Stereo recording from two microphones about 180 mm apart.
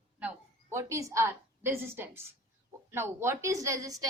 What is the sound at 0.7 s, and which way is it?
A woman's voice, 15° right (ahead or behind).